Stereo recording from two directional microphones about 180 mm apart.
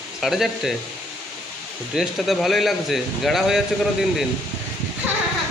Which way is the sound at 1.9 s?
Centre (ahead or behind).